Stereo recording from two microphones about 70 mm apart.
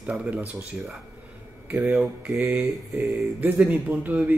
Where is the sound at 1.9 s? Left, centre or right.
Centre.